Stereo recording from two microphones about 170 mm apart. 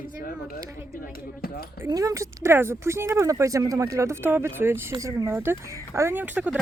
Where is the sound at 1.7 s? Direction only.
20° right (ahead or behind).